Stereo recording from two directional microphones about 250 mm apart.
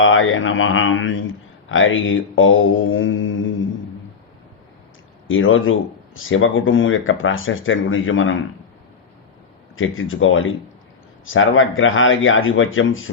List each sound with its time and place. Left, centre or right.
0.0 s speech: left
5.3 s speech: left
9.7 s speech: left